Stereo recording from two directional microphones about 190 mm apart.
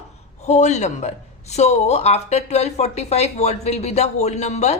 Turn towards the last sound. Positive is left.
turn(degrees=35)  # may be behind; listen again after turning